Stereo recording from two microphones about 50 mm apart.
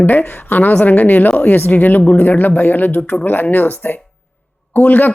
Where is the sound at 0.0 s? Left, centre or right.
Left.